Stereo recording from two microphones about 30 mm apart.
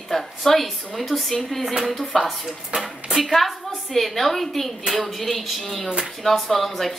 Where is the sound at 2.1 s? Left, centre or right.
Centre.